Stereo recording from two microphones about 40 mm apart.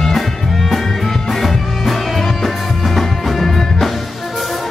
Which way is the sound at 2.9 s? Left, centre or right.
Centre.